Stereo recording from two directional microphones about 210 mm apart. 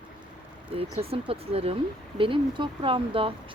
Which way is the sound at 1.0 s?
25° right (ahead or behind).